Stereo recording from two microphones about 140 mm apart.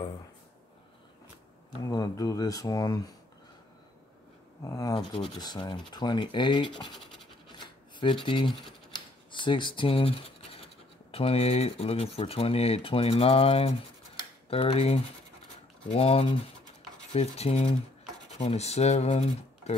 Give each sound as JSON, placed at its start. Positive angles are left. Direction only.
{"t": 1.8, "sound": "speech", "side_deg": 25}
{"t": 4.6, "sound": "speech", "side_deg": 25}
{"t": 6.7, "sound": "speech", "side_deg": 0}
{"t": 7.4, "sound": "shuffling cards", "side_deg": 35}
{"t": 9.3, "sound": "speech", "side_deg": 35}
{"t": 14.1, "sound": "computer keyboard", "side_deg": 40}
{"t": 15.9, "sound": "speech", "side_deg": 45}